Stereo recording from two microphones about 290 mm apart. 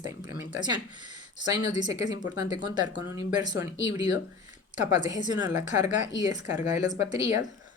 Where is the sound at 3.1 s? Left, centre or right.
Centre.